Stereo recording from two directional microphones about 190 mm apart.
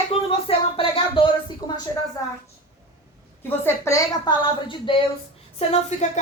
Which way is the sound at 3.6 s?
15° left (ahead or behind).